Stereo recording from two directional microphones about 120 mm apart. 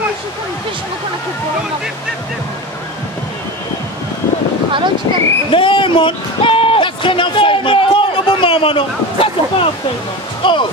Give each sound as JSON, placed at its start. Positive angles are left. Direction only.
{"t": 4.7, "sound": "speech", "side_deg": -45}
{"t": 5.5, "sound": "a sound", "side_deg": 45}
{"t": 10.4, "sound": "speech", "side_deg": 40}